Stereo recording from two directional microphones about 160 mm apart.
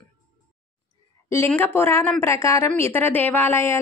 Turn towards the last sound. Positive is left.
turn(degrees=15)  # may be behind; listen again after turning